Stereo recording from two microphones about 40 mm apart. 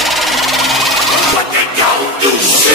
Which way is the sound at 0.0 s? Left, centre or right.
Centre.